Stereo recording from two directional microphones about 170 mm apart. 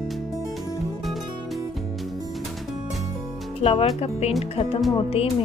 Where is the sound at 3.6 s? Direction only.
35° left (ahead or behind).